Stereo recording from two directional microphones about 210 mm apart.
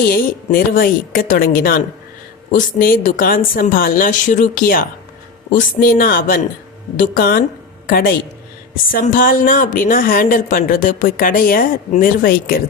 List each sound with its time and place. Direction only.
0.1 s a woman's voice: 45° left (ahead or behind)